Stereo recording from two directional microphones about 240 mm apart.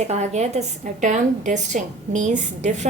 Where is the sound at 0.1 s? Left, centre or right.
Right.